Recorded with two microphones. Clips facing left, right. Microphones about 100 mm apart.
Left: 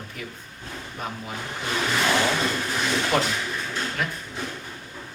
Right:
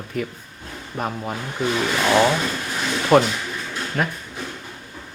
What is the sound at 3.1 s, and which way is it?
Speech, 50° right (ahead or behind).